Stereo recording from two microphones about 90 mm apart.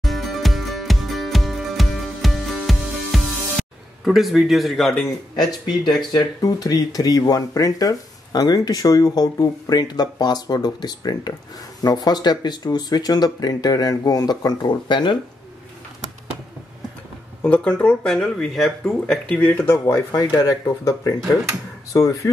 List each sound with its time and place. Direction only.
0.0 s music: centre (ahead or behind)
6.1 s speech: 40° left (ahead or behind); by 15.1 s 60° left (ahead or behind)
17.4 s speech: 15° left (ahead or behind)
20.1 s speech: 40° left (ahead or behind)